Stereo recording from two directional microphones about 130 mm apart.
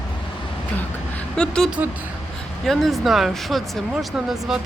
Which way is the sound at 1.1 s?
5° left (ahead or behind).